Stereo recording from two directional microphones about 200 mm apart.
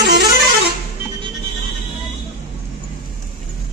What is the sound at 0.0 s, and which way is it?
Music, 55° right (ahead or behind).